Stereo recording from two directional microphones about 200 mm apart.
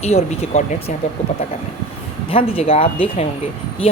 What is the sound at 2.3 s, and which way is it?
Speech, 30° left (ahead or behind).